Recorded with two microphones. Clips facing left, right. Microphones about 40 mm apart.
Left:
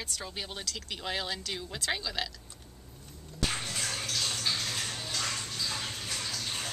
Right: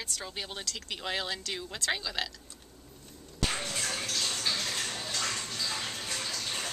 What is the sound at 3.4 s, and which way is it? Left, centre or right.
Music, centre.